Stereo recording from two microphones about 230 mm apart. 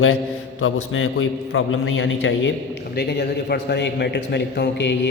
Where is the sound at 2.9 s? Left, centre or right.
Left.